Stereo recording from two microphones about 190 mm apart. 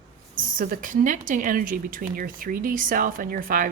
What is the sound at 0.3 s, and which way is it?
Speech, 45° right (ahead or behind).